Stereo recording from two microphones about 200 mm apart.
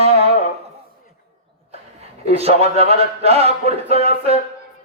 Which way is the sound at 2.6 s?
30° right (ahead or behind).